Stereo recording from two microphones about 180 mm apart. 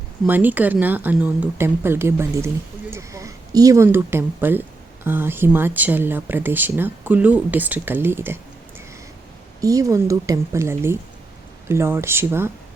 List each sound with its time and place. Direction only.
0.3 s speech: 10° right (ahead or behind)
9.6 s speech: 20° right (ahead or behind)